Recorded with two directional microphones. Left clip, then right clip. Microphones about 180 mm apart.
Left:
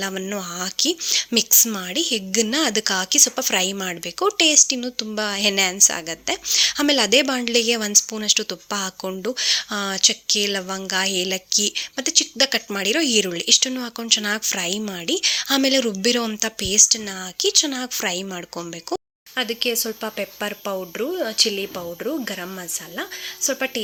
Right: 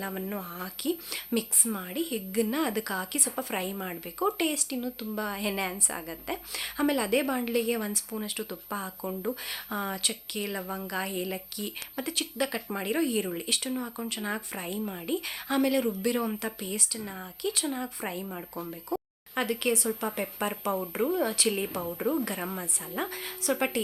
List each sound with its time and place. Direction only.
0.0 s a woman's voice: 35° left (ahead or behind)
19.4 s speech: 15° left (ahead or behind)